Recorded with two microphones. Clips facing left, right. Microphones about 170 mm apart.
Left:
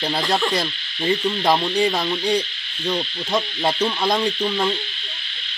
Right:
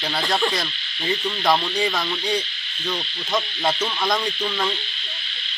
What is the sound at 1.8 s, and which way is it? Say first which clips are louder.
Insect: left 4 dB; 35° left (ahead or behind).